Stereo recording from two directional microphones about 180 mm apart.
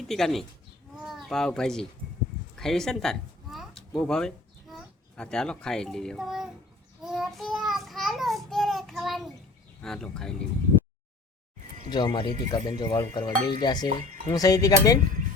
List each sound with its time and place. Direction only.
0.1 s speech: centre (ahead or behind)
7.0 s child singing: centre (ahead or behind)
9.8 s speech: 5° left (ahead or behind)
11.9 s speech: 25° left (ahead or behind)